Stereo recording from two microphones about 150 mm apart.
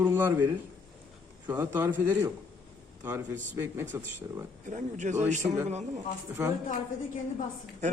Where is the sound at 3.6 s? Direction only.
15° right (ahead or behind).